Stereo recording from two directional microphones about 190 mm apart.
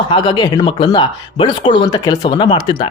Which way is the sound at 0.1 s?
25° left (ahead or behind).